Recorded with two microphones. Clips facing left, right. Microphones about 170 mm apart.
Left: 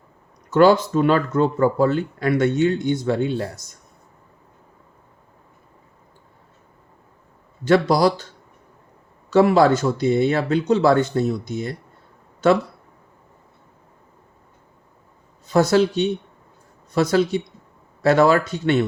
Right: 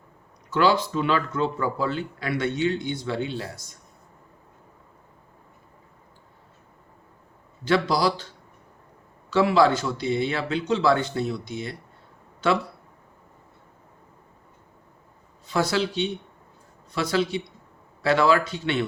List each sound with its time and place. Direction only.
0.5 s speech: 45° left (ahead or behind)
7.6 s speech: 45° left (ahead or behind)
9.3 s speech: 45° left (ahead or behind)
15.4 s speech: 45° left (ahead or behind)